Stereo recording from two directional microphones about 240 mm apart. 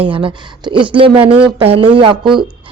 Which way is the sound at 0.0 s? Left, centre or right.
Right.